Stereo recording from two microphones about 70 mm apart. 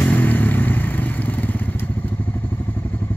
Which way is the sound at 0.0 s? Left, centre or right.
Left.